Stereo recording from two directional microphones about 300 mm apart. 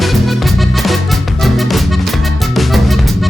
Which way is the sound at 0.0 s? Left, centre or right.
Centre.